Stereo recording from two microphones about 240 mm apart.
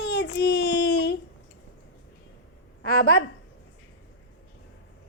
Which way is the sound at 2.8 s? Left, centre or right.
Left.